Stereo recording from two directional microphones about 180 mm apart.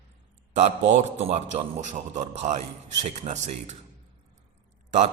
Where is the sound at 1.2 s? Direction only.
40° right (ahead or behind).